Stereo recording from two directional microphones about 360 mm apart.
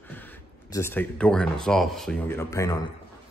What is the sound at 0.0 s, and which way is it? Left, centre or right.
Speech, centre.